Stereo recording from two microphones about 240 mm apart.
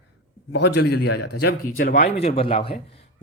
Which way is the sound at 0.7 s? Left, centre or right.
Left.